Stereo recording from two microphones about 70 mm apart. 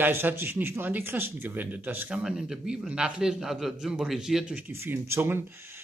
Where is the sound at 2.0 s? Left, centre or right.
Centre.